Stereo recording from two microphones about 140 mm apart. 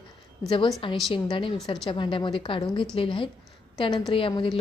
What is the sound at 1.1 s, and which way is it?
A woman's voice, 35° left (ahead or behind).